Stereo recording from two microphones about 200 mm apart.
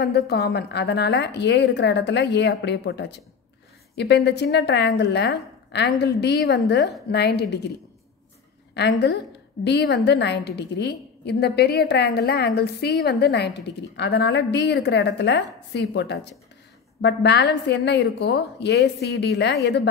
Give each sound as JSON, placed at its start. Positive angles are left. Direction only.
{"t": 0.0, "sound": "a woman's voice", "side_deg": 55}
{"t": 8.7, "sound": "a woman's voice", "side_deg": 60}